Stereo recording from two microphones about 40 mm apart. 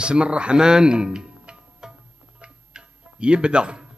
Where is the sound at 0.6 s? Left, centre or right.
Centre.